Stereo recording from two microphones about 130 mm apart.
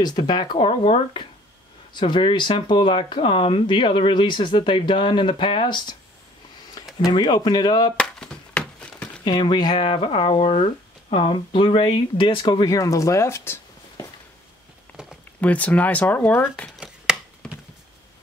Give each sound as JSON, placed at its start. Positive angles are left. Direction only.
{"t": 0.0, "sound": "speech", "side_deg": 35}
{"t": 7.1, "sound": "speech", "side_deg": 35}
{"t": 8.0, "sound": "a sound", "side_deg": 5}
{"t": 9.2, "sound": "speech", "side_deg": 35}
{"t": 15.4, "sound": "speech", "side_deg": 10}
{"t": 16.8, "sound": "chopping", "side_deg": -5}
{"t": 17.4, "sound": "a sound", "side_deg": 5}